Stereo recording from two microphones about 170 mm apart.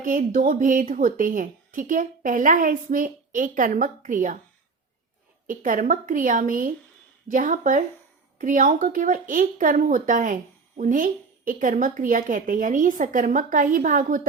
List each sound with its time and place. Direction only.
0.0 s speech: 50° right (ahead or behind)
5.5 s speech: 50° right (ahead or behind)